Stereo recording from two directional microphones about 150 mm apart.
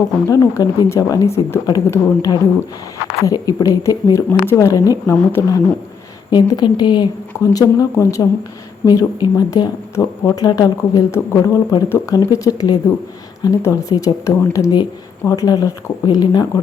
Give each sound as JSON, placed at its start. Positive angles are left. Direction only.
{"t": 0.3, "sound": "speech", "side_deg": 25}